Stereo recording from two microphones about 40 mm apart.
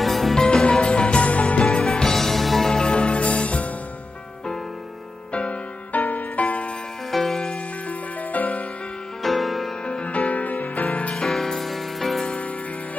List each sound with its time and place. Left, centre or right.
0.0 s music: centre; by 1.2 s left
1.2 s music: left
2.1 s music: centre
2.9 s music: left
5.3 s music: left
6.4 s music: left
7.1 s music: centre
8.3 s music: left
9.2 s music: centre
10.0 s music: left
11.1 s music: centre